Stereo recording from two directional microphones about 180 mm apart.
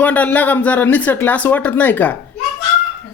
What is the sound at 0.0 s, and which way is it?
Speech, 10° left (ahead or behind).